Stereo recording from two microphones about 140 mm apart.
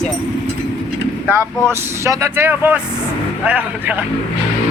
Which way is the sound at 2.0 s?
15° right (ahead or behind).